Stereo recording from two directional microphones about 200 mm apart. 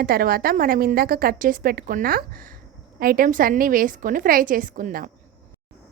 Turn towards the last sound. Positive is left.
turn(degrees=-40)  # may be behind; listen again after turning